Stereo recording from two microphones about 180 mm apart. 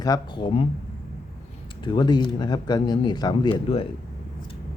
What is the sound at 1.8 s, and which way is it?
Speech, 25° left (ahead or behind).